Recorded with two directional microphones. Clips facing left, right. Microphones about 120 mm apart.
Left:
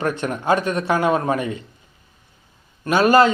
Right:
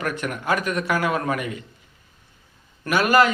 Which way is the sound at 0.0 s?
30° left (ahead or behind).